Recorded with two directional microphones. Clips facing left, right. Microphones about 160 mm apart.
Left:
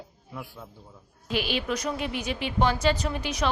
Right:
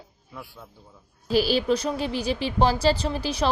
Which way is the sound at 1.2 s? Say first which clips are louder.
Right 7 dB; 35° right (ahead or behind).